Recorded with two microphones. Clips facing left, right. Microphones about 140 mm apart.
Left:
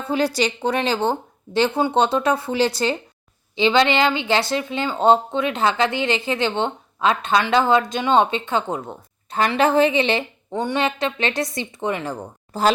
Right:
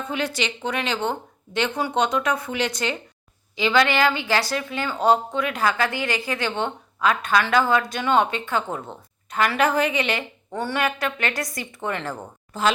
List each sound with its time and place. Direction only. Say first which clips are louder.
0.0 s a woman's voice: left 6 dB; 35° left (ahead or behind); by 12.2 s 15° left (ahead or behind)
12.5 s speech: left 3 dB; 35° left (ahead or behind)